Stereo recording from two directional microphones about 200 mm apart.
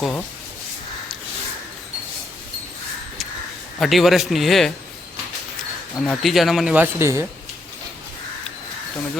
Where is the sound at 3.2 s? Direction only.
Centre (ahead or behind).